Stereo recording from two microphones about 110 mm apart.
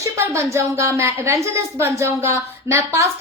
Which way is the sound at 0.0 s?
25° right (ahead or behind).